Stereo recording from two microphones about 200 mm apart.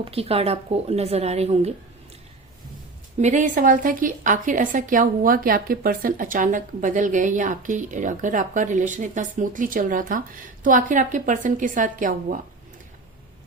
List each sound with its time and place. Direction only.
0.0 s a woman's voice: 30° right (ahead or behind)
3.2 s a woman's voice: 40° right (ahead or behind)